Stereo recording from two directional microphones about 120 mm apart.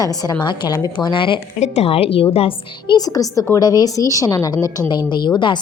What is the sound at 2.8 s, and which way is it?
A woman's voice, 35° left (ahead or behind).